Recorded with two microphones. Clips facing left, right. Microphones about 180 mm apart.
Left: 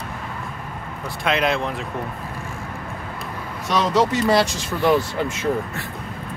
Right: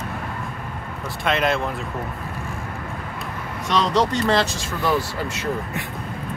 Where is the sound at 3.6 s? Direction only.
5° left (ahead or behind); by 5.0 s 20° left (ahead or behind).